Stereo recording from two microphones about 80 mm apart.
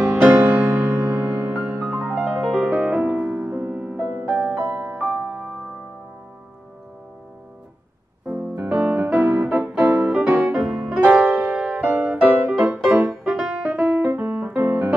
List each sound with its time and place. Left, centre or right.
0.2 s music: right
2.5 s music: centre
4.6 s music: centre
4.8 s music: centre
8.3 s music: right
8.6 s keyboard: centre
10.0 s music: centre
11.2 s music: right
14.1 s piano: right